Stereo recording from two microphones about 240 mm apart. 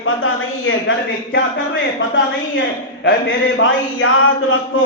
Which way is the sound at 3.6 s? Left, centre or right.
Left.